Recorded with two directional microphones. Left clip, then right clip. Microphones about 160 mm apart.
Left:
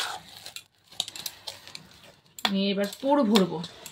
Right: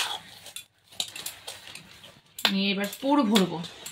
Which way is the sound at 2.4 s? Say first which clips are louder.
Right 1 dB; 25° right (ahead or behind).